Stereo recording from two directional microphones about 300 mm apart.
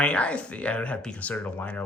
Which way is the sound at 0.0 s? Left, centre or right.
Centre.